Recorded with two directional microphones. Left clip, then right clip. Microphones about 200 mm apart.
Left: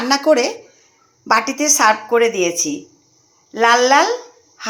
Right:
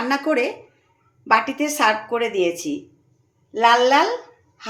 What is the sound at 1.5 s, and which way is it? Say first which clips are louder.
A woman's voice: left 5 dB; 10° left (ahead or behind).